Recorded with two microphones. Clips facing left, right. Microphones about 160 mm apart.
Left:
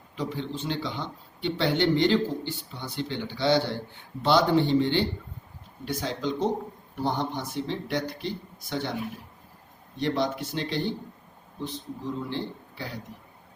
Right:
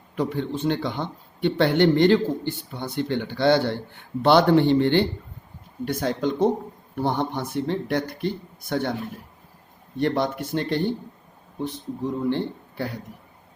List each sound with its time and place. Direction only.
0.2 s speech: 55° right (ahead or behind)
10.0 s speech: 55° right (ahead or behind)